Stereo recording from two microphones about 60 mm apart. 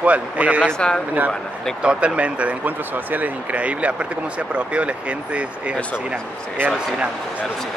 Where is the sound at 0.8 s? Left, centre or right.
Centre.